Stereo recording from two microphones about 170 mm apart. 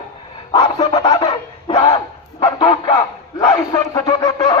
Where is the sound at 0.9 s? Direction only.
25° left (ahead or behind).